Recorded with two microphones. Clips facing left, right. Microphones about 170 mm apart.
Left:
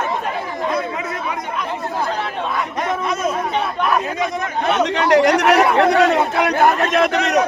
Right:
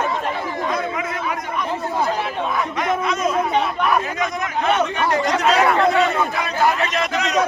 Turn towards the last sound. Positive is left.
turn(degrees=60)  # may be behind; listen again after turning